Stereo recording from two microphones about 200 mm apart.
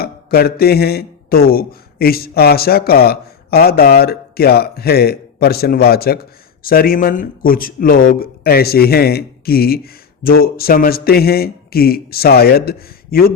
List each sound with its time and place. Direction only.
0.0 s speech: 50° left (ahead or behind)